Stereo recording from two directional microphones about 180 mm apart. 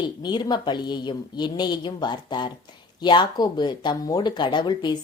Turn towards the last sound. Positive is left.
turn(degrees=25)  # may be behind; listen again after turning